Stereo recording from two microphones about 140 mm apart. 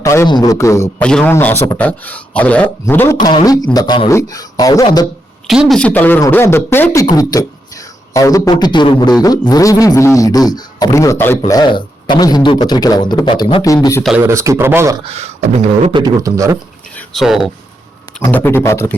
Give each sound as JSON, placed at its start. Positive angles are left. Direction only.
{"t": 0.0, "sound": "a man's voice", "side_deg": 20}
{"t": 1.0, "sound": "speech", "side_deg": 5}
{"t": 3.2, "sound": "a man's voice", "side_deg": 30}
{"t": 5.5, "sound": "speech", "side_deg": 0}
{"t": 7.0, "sound": "a man's voice", "side_deg": 30}
{"t": 11.5, "sound": "a man's voice", "side_deg": 30}
{"t": 14.2, "sound": "speech", "side_deg": -20}
{"t": 15.0, "sound": "beatboxing", "side_deg": -50}
{"t": 16.0, "sound": "speech", "side_deg": -25}
{"t": 17.2, "sound": "speech", "side_deg": 0}
{"t": 18.2, "sound": "speech", "side_deg": 15}